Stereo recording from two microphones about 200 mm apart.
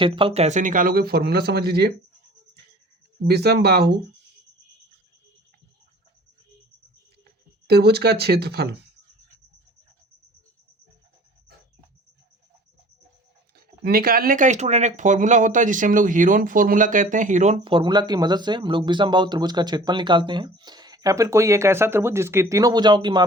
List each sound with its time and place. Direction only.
0.0 s speech: 25° right (ahead or behind); by 1.9 s 55° right (ahead or behind)
3.2 s speech: 55° right (ahead or behind)
7.7 s speech: 55° right (ahead or behind)
13.6 s speech: 50° right (ahead or behind); by 23.2 s 20° right (ahead or behind)